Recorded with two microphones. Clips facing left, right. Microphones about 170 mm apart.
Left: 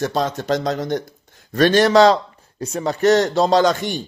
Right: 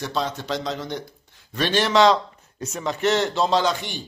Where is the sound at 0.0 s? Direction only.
45° left (ahead or behind).